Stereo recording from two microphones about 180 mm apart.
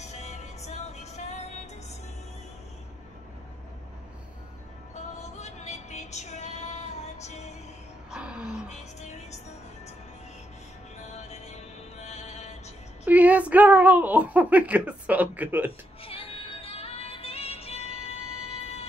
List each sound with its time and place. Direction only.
0.0 s music: 40° left (ahead or behind)
5.2 s music: 40° left (ahead or behind)
8.1 s a sound: 5° right (ahead or behind)
8.7 s music: 40° left (ahead or behind)
11.1 s music: 40° left (ahead or behind)
13.0 s speech: 10° right (ahead or behind)
16.0 s music: 30° left (ahead or behind)